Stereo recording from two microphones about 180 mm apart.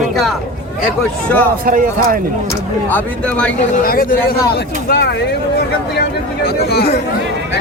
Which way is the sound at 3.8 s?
50° left (ahead or behind).